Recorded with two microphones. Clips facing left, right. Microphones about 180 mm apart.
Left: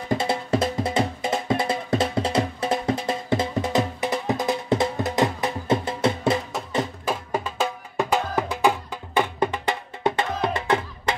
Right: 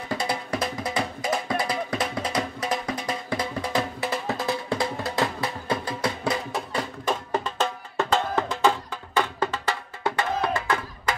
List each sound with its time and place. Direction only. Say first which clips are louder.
0.1 s music: left 5 dB; 25° left (ahead or behind)
7.1 s music: even; 5° left (ahead or behind); by 11.1 s 25° left (ahead or behind)